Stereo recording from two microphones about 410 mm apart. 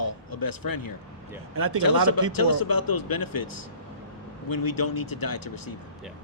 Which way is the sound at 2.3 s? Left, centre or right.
Left.